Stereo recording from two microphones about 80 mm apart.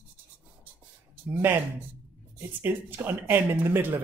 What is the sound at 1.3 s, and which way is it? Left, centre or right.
Speech, right.